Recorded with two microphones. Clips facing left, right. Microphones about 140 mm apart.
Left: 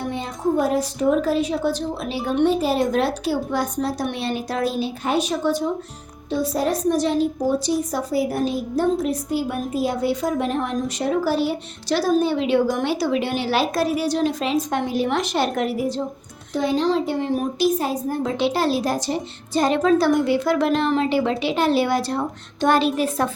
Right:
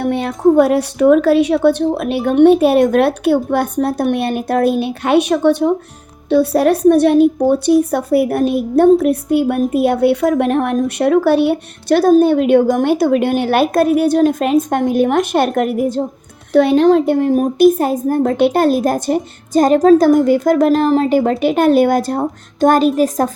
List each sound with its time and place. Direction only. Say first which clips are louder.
0.0 s a woman's voice: right 10 dB; 65° right (ahead or behind)
16.5 s a woman's voice: right 10 dB; 65° right (ahead or behind); by 23.3 s 40° right (ahead or behind)